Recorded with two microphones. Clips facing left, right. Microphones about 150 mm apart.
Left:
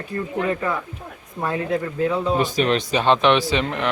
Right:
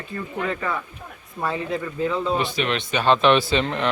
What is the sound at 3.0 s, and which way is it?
Speech, 15° left (ahead or behind).